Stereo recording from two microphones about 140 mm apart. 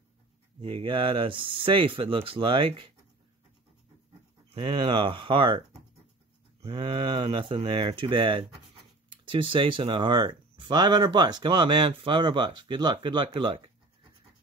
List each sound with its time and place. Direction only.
0.7 s speech: 35° right (ahead or behind)
4.6 s speech: 35° right (ahead or behind)
6.7 s speech: 35° right (ahead or behind)